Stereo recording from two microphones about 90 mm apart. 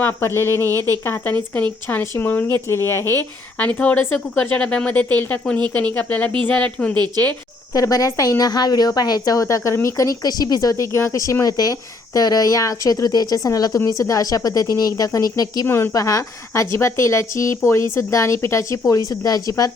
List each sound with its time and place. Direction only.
0.0 s a woman's voice: 25° left (ahead or behind)
7.7 s a woman's voice: 40° left (ahead or behind)
15.6 s a woman's voice: 25° left (ahead or behind)
15.9 s a woman's voice: 40° left (ahead or behind)